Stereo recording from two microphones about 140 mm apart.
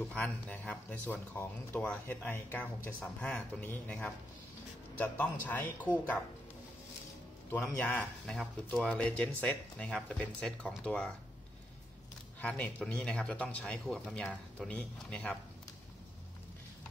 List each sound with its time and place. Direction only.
0.1 s speech: 10° left (ahead or behind)
7.5 s speech: 15° left (ahead or behind)
12.4 s speech: 10° left (ahead or behind)